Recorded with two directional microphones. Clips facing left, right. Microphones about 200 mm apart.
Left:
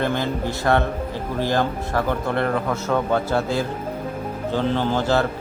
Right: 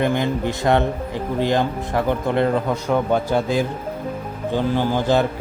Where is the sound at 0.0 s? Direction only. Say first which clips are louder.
Right 3 dB; 15° right (ahead or behind).